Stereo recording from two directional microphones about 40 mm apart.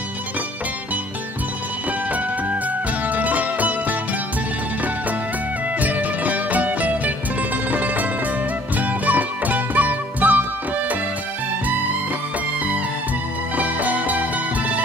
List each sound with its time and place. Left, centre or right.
3.1 s music: right
5.8 s music: right
13.6 s music: right